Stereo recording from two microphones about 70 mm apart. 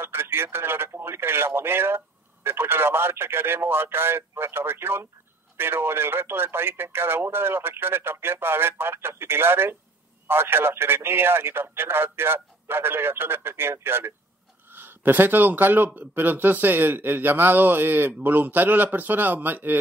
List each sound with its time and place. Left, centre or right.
0.0 s speech: right